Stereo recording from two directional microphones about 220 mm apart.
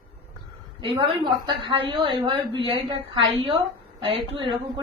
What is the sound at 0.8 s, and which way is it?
A woman's voice, 20° right (ahead or behind).